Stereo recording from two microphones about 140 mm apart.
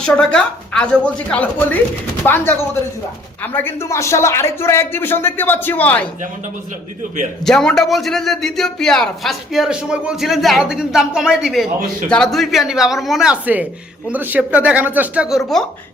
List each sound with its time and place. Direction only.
0.0 s speech: 5° left (ahead or behind)
7.4 s a man's voice: 5° left (ahead or behind)
12.0 s a man's voice: 5° left (ahead or behind)